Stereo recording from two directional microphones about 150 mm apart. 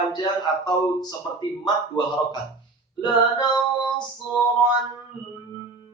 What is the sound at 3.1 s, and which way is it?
Speech, 30° left (ahead or behind).